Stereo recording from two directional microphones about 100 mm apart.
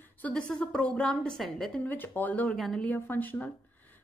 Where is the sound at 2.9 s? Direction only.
20° left (ahead or behind).